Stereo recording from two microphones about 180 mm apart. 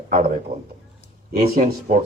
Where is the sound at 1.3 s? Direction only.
55° right (ahead or behind).